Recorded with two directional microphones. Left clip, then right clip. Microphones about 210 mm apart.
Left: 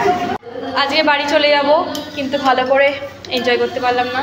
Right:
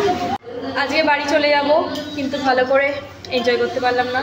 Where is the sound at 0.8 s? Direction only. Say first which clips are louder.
Left 3 dB; 10° right (ahead or behind).